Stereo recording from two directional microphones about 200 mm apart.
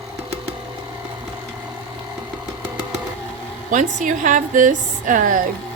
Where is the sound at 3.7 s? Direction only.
40° right (ahead or behind).